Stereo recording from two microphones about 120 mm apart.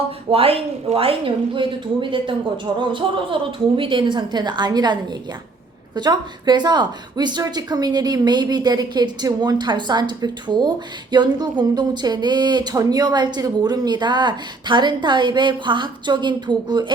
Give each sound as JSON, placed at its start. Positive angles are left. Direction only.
{"t": 0.3, "sound": "speech", "side_deg": -55}